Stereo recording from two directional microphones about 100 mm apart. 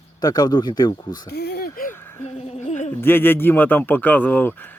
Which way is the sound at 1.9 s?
25° left (ahead or behind).